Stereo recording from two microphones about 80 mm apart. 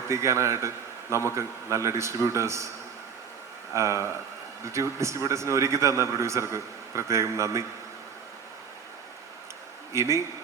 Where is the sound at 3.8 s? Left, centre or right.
Right.